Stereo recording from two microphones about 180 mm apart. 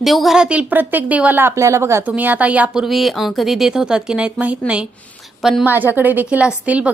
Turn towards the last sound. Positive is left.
turn(degrees=-5)  # may be behind; listen again after turning